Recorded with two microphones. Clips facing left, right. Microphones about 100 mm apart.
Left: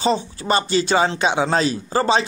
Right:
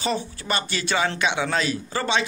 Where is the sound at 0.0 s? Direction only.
30° left (ahead or behind).